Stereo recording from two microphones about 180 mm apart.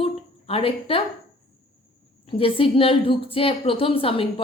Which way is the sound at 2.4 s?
30° left (ahead or behind).